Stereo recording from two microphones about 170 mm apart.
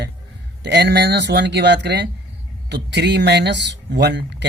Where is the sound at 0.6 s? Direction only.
85° right.